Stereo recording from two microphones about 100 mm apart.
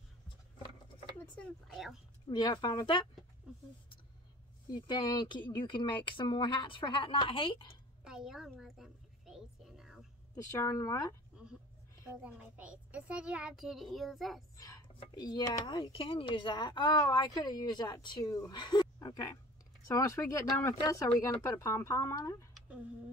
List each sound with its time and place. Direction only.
1.1 s a sound: 15° left (ahead or behind)
1.7 s speech: centre (ahead or behind)
2.2 s speech: 45° left (ahead or behind)
4.7 s speech: 45° left (ahead or behind); by 7.7 s 60° left (ahead or behind)
8.0 s a woman's voice: 5° right (ahead or behind)
8.5 s a sound: 5° right (ahead or behind)
10.3 s speech: 35° left (ahead or behind)
12.2 s a child's voice: 15° right (ahead or behind)
15.1 s speech: 40° left (ahead or behind)